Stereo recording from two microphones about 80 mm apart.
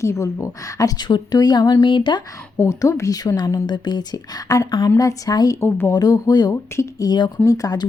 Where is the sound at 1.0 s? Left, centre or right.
Left.